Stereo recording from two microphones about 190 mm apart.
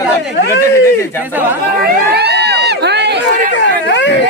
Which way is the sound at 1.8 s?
60° right (ahead or behind).